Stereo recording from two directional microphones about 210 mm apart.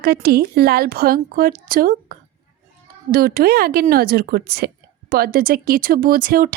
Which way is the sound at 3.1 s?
45° right (ahead or behind).